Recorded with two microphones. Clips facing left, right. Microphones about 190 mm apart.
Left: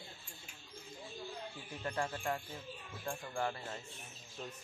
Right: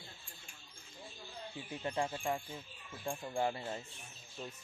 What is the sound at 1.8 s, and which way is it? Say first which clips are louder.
A man's voice: right 1 dB; 15° right (ahead or behind).